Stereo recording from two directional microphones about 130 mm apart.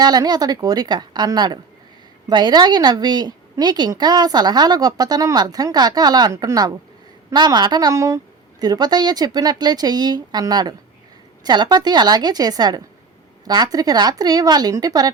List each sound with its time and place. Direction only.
0.0 s a woman's voice: 30° right (ahead or behind)